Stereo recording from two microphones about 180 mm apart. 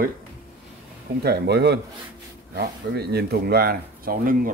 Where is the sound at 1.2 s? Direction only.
65° right (ahead or behind).